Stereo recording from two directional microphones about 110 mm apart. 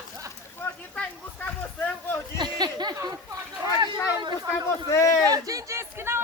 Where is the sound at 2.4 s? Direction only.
40° right (ahead or behind).